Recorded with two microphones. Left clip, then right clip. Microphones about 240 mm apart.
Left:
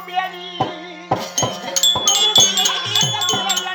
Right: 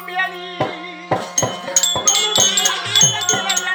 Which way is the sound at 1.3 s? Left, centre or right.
Centre.